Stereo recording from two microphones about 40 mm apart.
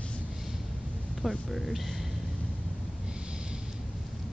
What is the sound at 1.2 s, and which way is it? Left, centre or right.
Speech, centre.